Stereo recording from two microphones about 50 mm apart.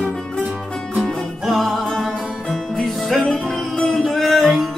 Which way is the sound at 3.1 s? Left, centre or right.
Centre.